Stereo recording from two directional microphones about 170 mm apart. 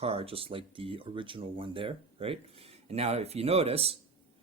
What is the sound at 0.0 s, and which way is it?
Speech, 35° right (ahead or behind).